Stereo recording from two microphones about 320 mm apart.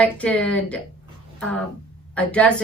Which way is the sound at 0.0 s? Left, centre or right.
Centre.